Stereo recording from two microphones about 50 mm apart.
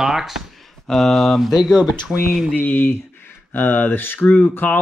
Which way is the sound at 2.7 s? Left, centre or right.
Left.